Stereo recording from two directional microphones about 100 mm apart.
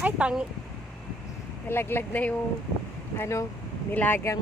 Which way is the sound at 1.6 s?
20° left (ahead or behind).